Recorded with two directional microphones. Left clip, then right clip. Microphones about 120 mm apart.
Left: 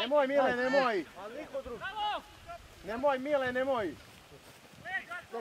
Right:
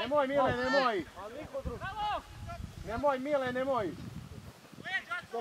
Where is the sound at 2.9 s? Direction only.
30° left (ahead or behind).